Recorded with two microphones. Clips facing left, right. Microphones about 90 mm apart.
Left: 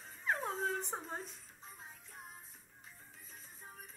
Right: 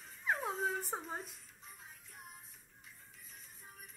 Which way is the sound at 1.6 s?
30° left (ahead or behind).